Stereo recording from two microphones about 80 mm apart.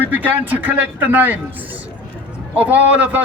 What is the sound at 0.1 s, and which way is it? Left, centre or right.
A man's voice, right.